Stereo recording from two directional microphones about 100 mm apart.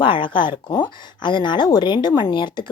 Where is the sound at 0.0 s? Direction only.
55° left (ahead or behind).